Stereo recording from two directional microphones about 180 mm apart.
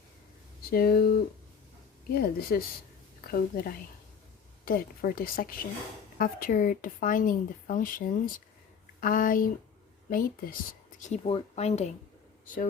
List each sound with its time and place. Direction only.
0.7 s speech: 55° left (ahead or behind)
11.0 s speech: 35° left (ahead or behind)